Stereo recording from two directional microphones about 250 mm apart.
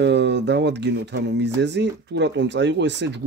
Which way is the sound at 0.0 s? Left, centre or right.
Right.